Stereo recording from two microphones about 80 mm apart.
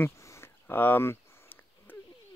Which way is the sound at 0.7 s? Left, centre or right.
Left.